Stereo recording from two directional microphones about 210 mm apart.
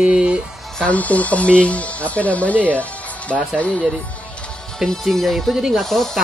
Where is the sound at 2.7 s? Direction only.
5° left (ahead or behind).